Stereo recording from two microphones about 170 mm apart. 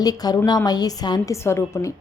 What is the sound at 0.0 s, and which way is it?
A woman's voice, 20° left (ahead or behind).